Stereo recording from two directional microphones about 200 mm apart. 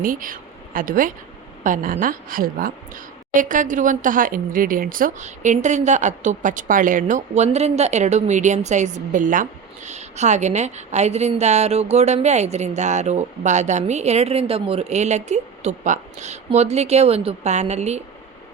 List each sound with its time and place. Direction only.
0.0 s a woman's voice: 45° right (ahead or behind)